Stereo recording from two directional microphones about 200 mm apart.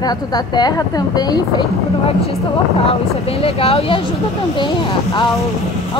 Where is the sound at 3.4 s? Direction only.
30° left (ahead or behind).